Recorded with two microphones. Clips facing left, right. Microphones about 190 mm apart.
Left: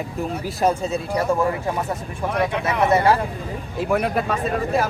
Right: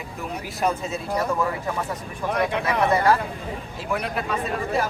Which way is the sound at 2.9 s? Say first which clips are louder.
Left 3 dB; 30° left (ahead or behind).